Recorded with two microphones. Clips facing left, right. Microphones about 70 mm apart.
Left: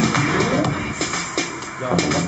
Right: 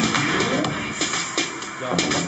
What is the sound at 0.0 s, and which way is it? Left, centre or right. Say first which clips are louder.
Music: left 3 dB; centre.